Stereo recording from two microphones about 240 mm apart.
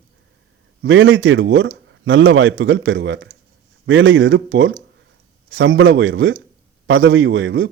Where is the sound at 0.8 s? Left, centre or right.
Right.